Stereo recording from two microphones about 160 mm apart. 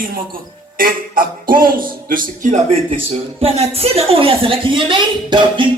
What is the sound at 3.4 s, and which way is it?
A woman's voice, 40° right (ahead or behind).